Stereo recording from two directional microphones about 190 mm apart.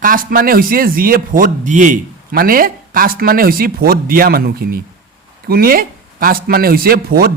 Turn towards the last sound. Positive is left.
turn(degrees=-50)  # may be behind; listen again after turning